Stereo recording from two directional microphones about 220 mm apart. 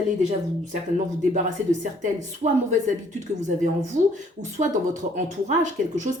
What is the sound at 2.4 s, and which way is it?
Speech, 35° right (ahead or behind).